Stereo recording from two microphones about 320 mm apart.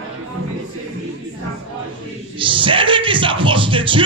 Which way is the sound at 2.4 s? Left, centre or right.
Centre.